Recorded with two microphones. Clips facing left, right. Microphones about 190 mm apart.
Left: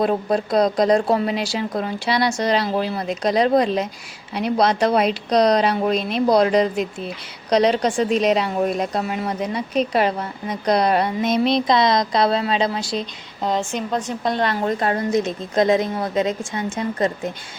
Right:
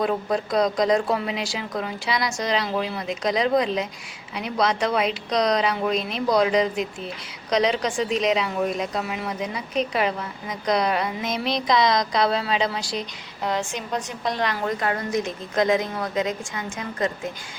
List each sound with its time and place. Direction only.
0.0 s a woman's voice: 35° left (ahead or behind)
7.9 s a woman's voice: 45° left (ahead or behind); by 17.1 s 25° left (ahead or behind)